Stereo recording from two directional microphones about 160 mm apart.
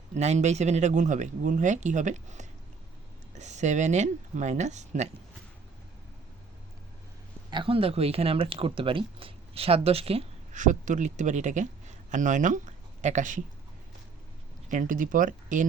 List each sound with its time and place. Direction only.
0.1 s speech: 45° right (ahead or behind)
7.5 s speech: 35° right (ahead or behind); by 13.4 s 50° right (ahead or behind)
14.7 s speech: 55° right (ahead or behind)